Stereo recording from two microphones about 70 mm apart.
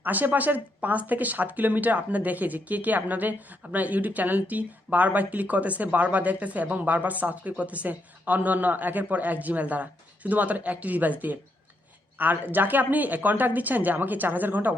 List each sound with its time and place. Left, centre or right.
0.0 s speech: right